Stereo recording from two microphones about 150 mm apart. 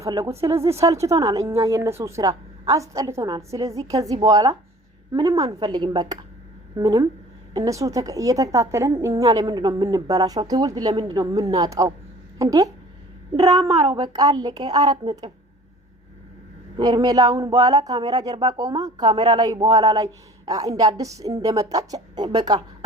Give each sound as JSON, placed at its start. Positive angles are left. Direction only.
{"t": 0.0, "sound": "speech", "side_deg": -20}
{"t": 16.7, "sound": "speech", "side_deg": -30}